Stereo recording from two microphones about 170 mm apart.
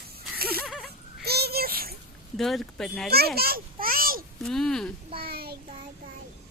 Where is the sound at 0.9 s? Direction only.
70° right (ahead or behind).